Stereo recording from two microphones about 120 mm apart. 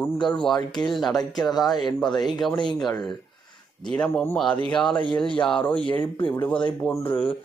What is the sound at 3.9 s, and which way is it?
A man's voice, 5° left (ahead or behind).